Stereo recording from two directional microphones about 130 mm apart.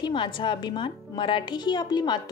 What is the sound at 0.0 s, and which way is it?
A woman's voice, 40° left (ahead or behind).